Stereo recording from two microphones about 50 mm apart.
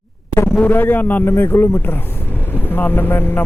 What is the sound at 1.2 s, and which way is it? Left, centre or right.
Speech, left.